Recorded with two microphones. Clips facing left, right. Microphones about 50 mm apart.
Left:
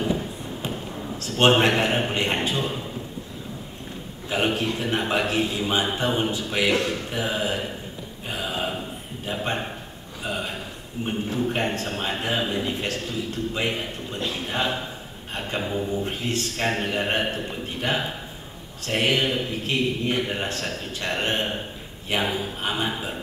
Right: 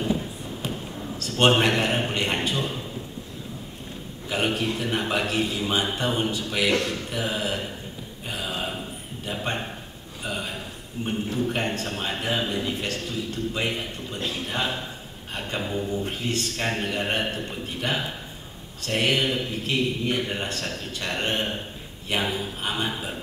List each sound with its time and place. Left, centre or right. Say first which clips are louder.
1.3 s a man's voice: left 2 dB; centre
4.3 s a man's voice: left 1 dB; centre
8.3 s a sound: left 2 dB; centre
11.0 s a man's voice: left 1 dB; centre
19.6 s speech: even; left
20.2 s a man's voice: left 2 dB; centre